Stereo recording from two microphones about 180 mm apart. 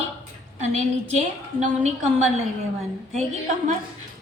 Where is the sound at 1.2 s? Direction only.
40° right (ahead or behind).